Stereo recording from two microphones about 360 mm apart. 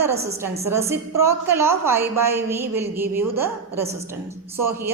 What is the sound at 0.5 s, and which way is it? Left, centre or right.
A woman's voice, centre.